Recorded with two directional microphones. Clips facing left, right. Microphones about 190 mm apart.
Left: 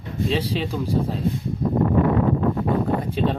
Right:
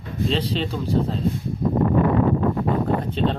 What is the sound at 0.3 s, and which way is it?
Speech, 10° left (ahead or behind).